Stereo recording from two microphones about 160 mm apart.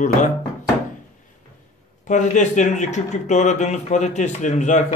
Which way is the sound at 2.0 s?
50° left (ahead or behind).